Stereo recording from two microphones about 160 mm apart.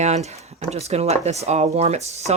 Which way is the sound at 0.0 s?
45° right (ahead or behind).